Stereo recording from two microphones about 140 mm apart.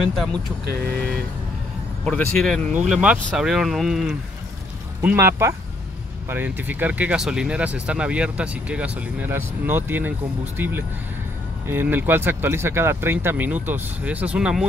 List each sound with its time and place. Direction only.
0.1 s speech: centre (ahead or behind)
2.0 s speech: 5° left (ahead or behind)
5.0 s speech: 20° right (ahead or behind)